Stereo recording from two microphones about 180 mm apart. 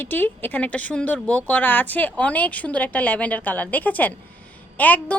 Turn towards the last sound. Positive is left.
turn(degrees=10)  # may be behind; listen again after turning